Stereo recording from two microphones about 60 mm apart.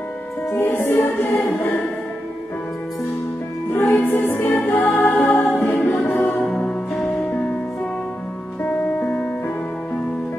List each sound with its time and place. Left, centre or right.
0.5 s music: left
3.7 s music: left
6.4 s music: centre
8.8 s music: left